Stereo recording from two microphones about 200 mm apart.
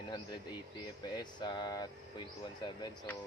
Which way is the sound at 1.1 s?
20° left (ahead or behind).